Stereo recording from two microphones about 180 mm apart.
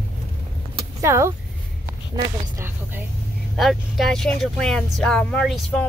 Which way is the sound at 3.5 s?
Centre (ahead or behind).